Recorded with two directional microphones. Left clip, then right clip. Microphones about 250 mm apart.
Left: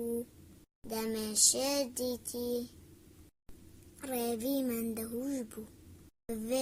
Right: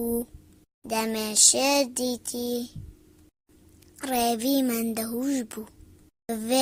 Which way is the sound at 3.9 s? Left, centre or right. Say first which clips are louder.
Right 10 dB; right.